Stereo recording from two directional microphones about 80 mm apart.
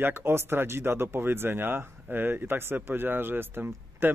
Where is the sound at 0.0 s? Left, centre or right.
Right.